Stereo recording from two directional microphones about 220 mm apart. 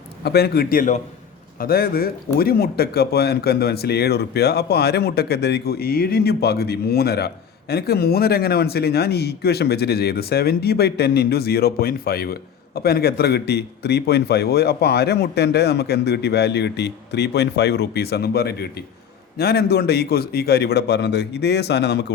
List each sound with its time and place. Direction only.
0.2 s speech: 45° left (ahead or behind)